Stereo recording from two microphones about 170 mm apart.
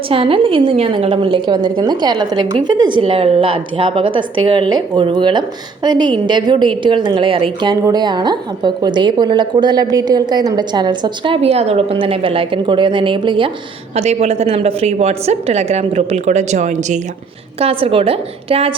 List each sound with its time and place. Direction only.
0.1 s a woman's voice: 30° right (ahead or behind)
17.6 s a woman's voice: 35° right (ahead or behind)